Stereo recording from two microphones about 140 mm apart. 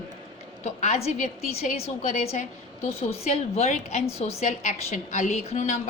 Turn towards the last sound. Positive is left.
turn(degrees=55)  # may be behind; listen again after turning